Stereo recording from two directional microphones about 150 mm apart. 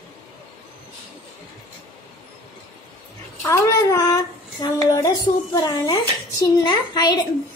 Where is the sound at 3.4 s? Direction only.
20° left (ahead or behind).